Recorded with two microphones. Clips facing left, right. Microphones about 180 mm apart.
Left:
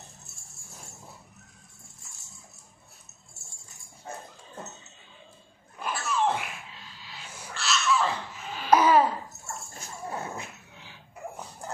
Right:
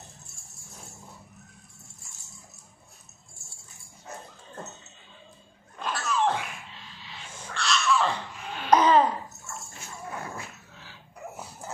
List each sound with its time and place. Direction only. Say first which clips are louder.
5.8 s a sound: right 1 dB; 10° left (ahead or behind)
7.3 s babbling: right 2 dB; 5° left (ahead or behind)
9.5 s dog: left 1 dB; 35° left (ahead or behind); by 11.0 s 15° left (ahead or behind)